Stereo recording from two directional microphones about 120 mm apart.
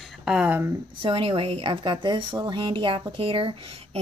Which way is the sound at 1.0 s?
50° right (ahead or behind).